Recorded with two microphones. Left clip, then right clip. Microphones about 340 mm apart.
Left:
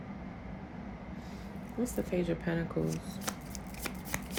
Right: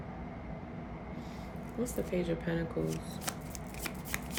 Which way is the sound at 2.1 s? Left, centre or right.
Centre.